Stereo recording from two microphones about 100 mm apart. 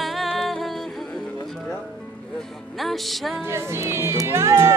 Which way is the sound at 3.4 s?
25° right (ahead or behind).